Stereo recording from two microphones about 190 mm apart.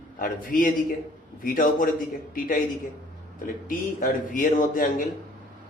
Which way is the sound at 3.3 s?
45° left (ahead or behind).